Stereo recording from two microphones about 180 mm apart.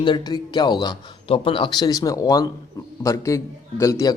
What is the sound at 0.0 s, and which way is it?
A man's voice, 25° left (ahead or behind).